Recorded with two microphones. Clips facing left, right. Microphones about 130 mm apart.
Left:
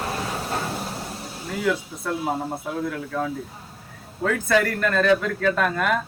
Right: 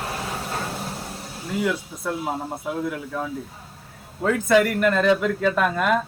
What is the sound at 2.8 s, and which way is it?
Speech, 10° right (ahead or behind).